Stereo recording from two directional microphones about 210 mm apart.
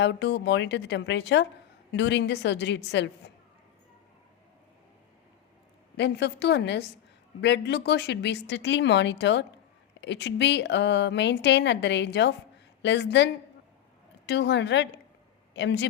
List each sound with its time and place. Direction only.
0.0 s a woman's voice: 55° left (ahead or behind)
6.0 s a woman's voice: 55° left (ahead or behind)